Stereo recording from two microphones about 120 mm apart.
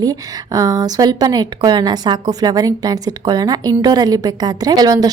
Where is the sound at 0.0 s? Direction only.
30° right (ahead or behind).